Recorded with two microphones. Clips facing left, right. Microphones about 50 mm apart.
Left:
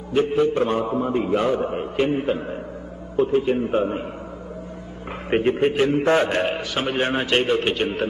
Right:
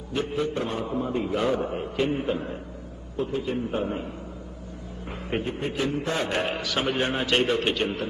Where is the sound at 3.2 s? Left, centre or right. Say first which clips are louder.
Left 8 dB; left.